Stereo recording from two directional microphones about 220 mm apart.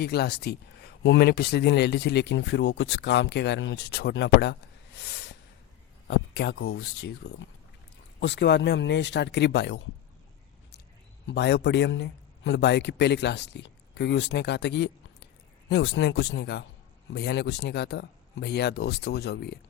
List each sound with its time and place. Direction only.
0.0 s speech: 45° left (ahead or behind)
4.9 s a sound: 50° left (ahead or behind)
6.1 s speech: 50° left (ahead or behind)
11.3 s speech: 55° left (ahead or behind)